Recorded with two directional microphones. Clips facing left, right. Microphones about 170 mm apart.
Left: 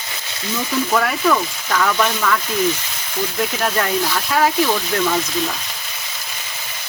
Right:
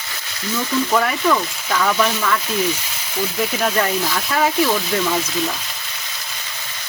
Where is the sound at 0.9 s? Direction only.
Centre (ahead or behind).